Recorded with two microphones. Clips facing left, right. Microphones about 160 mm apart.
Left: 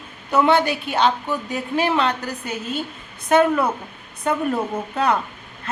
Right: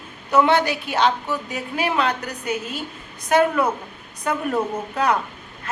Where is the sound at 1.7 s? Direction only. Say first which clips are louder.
Left 2 dB; 30° left (ahead or behind).